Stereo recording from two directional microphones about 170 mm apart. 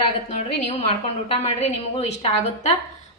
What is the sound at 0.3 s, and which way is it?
A woman's voice, 45° left (ahead or behind).